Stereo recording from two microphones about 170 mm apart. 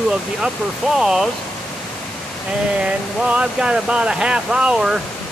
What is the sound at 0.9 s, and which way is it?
Speech, 5° right (ahead or behind).